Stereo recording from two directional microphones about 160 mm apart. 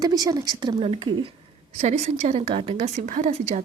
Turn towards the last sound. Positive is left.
turn(degrees=-55)  # may be behind; listen again after turning